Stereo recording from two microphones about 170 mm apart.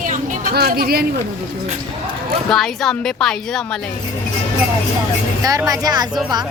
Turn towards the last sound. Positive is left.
turn(degrees=-25)  # may be behind; listen again after turning